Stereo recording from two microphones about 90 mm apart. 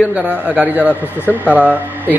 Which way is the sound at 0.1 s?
15° right (ahead or behind).